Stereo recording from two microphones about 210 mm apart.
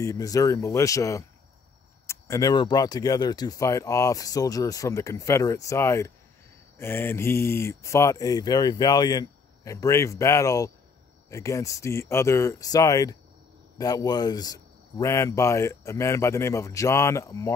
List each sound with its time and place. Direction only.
0.0 s speech: 15° left (ahead or behind)